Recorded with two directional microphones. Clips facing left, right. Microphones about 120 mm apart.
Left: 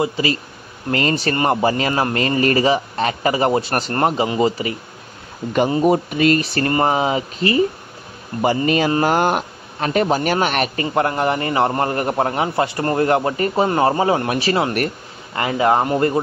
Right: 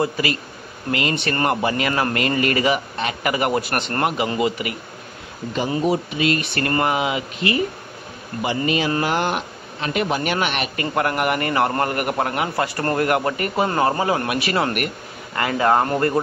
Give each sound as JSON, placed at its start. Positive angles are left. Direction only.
{"t": 0.2, "sound": "a man's voice", "side_deg": 20}
{"t": 0.9, "sound": "a man's voice", "side_deg": 35}
{"t": 1.3, "sound": "a man's voice", "side_deg": 25}
{"t": 5.9, "sound": "a man's voice", "side_deg": 45}
{"t": 11.0, "sound": "a man's voice", "side_deg": 25}
{"t": 15.3, "sound": "speech", "side_deg": 20}